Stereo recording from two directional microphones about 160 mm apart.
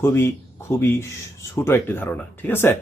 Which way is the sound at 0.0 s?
15° left (ahead or behind).